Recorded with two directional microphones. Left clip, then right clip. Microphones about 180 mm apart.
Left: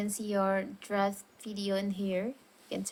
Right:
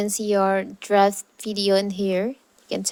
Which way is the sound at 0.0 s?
45° right (ahead or behind).